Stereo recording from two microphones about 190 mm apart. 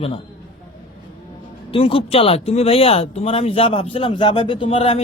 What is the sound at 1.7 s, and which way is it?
Speech, 30° left (ahead or behind).